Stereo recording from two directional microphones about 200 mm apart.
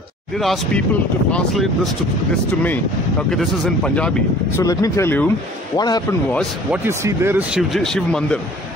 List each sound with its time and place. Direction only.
0.4 s a man's voice: centre (ahead or behind); by 6.0 s 20° left (ahead or behind)
6.7 s speech: 15° right (ahead or behind); by 8.4 s 5° left (ahead or behind)